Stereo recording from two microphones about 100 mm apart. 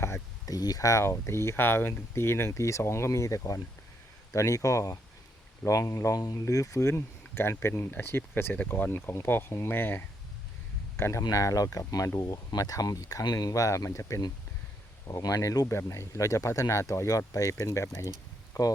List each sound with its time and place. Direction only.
0.0 s speech: 35° left (ahead or behind)